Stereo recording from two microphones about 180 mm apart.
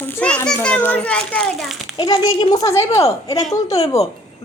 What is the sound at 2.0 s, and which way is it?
A child's voice, 25° left (ahead or behind).